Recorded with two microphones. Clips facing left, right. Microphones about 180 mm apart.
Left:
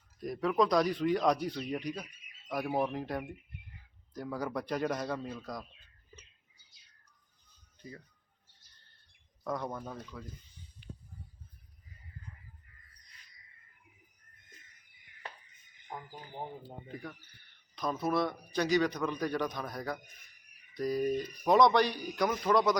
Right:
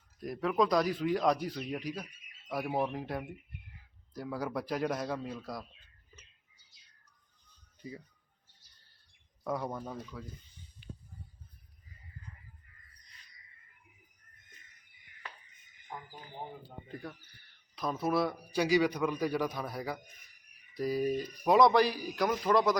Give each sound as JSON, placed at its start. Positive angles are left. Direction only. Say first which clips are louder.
{"t": 0.2, "sound": "speech", "louder": "left 1 dB", "side_deg": 0}
{"t": 9.4, "sound": "a man's voice", "louder": "right 1 dB", "side_deg": -10}
{"t": 16.9, "sound": "a man's voice", "louder": "right 2 dB", "side_deg": -5}